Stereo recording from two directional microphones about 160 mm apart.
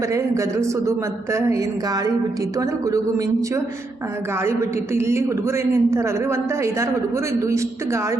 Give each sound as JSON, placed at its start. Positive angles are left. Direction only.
{"t": 0.1, "sound": "speech", "side_deg": -20}
{"t": 4.9, "sound": "speech", "side_deg": -15}